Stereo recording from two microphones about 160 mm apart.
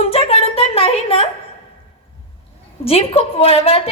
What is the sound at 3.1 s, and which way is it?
Speech, 35° left (ahead or behind).